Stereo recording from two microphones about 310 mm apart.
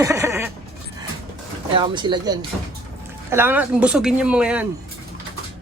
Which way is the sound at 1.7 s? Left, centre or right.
Centre.